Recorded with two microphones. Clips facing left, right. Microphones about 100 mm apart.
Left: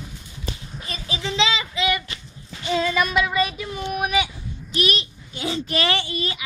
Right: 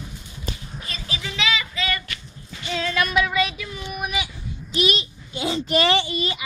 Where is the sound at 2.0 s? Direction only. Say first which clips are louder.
Right 1 dB; 25° left (ahead or behind).